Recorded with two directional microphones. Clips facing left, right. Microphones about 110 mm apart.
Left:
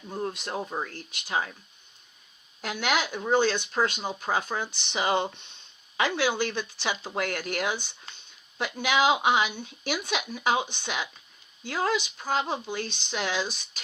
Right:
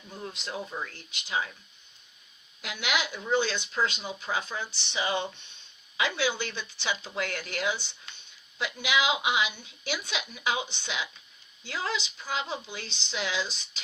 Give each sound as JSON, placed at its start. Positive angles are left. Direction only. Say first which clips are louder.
{"t": 0.1, "sound": "speech", "louder": "left 6 dB", "side_deg": 45}
{"t": 2.6, "sound": "speech", "louder": "left 4 dB", "side_deg": 45}